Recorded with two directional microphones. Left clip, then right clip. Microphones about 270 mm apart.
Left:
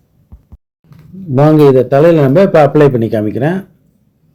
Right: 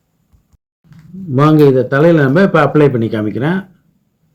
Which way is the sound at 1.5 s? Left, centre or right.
Centre.